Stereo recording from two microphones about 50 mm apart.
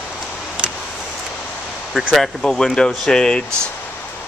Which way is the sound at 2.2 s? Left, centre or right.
Centre.